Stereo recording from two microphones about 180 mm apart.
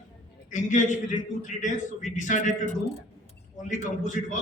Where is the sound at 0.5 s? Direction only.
45° left (ahead or behind).